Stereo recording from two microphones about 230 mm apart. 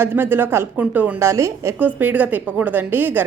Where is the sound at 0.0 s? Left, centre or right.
Centre.